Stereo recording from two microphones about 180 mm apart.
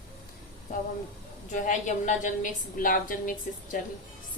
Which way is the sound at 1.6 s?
45° left (ahead or behind).